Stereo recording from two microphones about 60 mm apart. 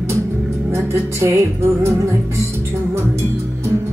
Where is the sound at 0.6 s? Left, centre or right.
Right.